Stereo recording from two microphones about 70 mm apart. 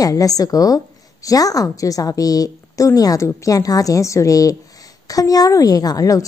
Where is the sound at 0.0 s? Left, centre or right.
Left.